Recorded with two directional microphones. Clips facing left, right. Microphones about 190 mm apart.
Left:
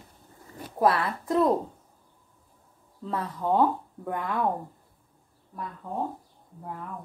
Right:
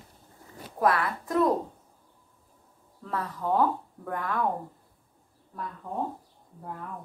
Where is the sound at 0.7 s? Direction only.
25° left (ahead or behind).